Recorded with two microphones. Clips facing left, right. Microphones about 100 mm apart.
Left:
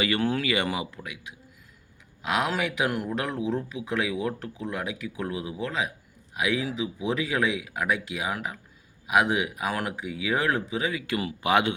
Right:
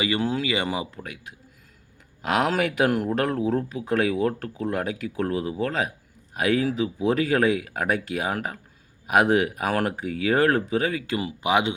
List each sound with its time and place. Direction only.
0.0 s speech: 20° right (ahead or behind)
1.0 s speech: 45° right (ahead or behind)
11.0 s speech: 25° right (ahead or behind)